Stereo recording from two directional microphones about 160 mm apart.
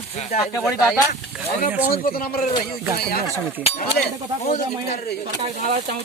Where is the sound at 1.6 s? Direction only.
65° left (ahead or behind).